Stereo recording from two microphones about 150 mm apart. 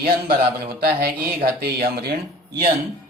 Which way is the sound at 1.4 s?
90° right.